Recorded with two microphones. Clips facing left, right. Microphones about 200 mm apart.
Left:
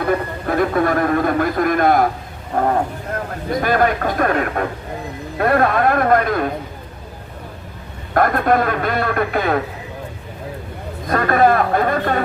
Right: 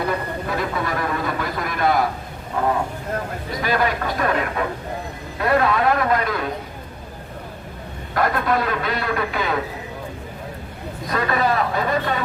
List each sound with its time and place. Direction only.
0.1 s a sound: 50° left (ahead or behind)
3.5 s a man's voice: 50° left (ahead or behind)
8.1 s a man's voice: 50° left (ahead or behind)
11.1 s a man's voice: 50° left (ahead or behind)